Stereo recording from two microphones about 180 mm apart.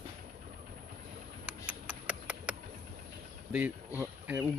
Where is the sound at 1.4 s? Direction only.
10° right (ahead or behind).